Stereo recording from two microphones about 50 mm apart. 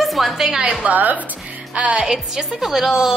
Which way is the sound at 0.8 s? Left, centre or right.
Right.